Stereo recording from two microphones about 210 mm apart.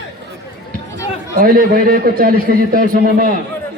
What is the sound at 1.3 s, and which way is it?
A man's voice, 45° right (ahead or behind).